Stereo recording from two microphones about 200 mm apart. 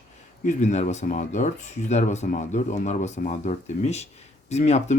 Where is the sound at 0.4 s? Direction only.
35° left (ahead or behind).